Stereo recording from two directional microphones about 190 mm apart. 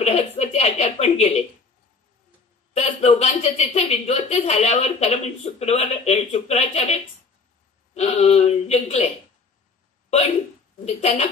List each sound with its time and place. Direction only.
0.0 s a sound: 35° left (ahead or behind)
2.7 s a woman's voice: 35° left (ahead or behind)
10.9 s a woman's voice: 35° left (ahead or behind)